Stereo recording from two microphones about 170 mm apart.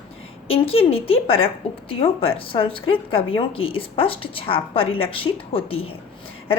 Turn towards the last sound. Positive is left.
turn(degrees=35)  # may be behind; listen again after turning